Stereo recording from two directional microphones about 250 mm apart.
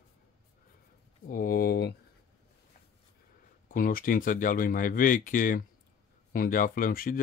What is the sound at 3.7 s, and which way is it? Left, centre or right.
Speech, left.